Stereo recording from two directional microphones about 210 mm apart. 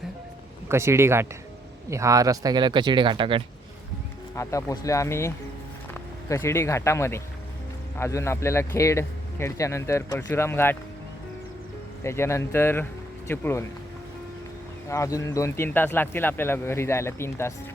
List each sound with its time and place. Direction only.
0.7 s speech: 10° right (ahead or behind)
4.4 s speech: 15° left (ahead or behind)
12.0 s speech: 10° left (ahead or behind)
14.8 s speech: 15° left (ahead or behind)